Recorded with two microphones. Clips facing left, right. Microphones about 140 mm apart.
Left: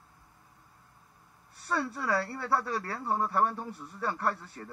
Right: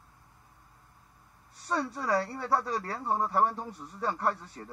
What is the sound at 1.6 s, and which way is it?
Speech, 20° right (ahead or behind).